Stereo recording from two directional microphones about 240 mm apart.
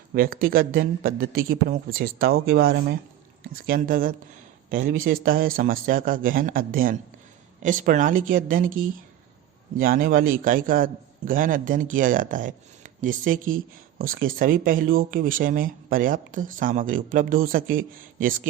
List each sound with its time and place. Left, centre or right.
0.1 s speech: right